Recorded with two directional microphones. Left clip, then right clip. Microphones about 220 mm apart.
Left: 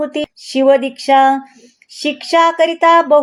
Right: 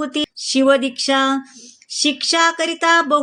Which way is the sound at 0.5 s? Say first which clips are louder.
Left 4 dB; 15° right (ahead or behind).